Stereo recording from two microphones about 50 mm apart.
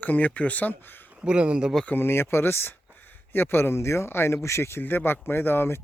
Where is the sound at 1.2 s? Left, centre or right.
Right.